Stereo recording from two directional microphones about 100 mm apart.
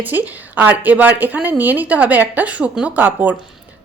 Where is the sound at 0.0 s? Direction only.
15° right (ahead or behind).